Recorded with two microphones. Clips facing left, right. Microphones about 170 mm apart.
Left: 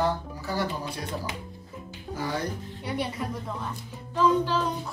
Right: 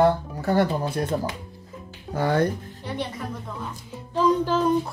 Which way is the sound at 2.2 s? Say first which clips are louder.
Right 9 dB; 60° right (ahead or behind).